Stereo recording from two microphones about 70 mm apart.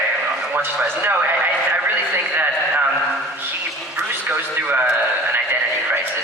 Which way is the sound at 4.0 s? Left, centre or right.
Right.